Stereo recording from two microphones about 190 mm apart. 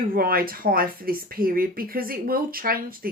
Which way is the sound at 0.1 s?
50° right (ahead or behind).